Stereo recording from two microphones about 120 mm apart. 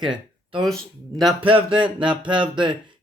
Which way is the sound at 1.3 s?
45° right (ahead or behind).